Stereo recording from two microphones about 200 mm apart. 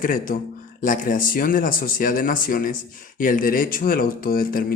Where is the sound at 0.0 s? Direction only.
45° left (ahead or behind).